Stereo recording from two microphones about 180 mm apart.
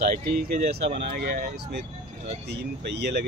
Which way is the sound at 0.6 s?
60° right (ahead or behind).